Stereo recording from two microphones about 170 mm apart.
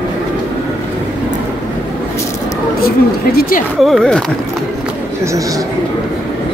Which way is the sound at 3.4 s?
55° left (ahead or behind).